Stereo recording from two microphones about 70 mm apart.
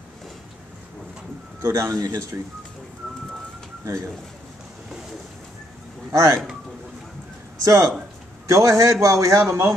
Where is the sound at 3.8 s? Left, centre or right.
Right.